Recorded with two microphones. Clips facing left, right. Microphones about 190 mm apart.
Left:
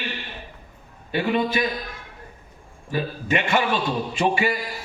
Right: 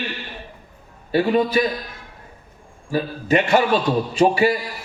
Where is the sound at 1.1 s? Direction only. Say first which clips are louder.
Right 5 dB; 40° right (ahead or behind).